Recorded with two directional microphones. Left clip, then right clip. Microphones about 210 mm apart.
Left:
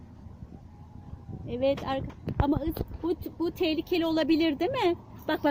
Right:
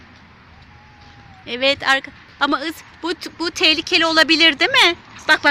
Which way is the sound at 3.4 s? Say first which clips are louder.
Right 12 dB; 5° right (ahead or behind).